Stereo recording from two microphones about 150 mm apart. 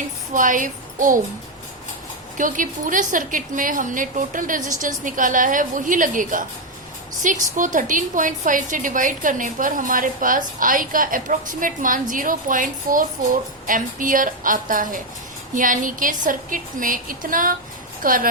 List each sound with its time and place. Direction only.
0.3 s a woman's voice: 60° right (ahead or behind)
2.4 s a woman's voice: 60° right (ahead or behind)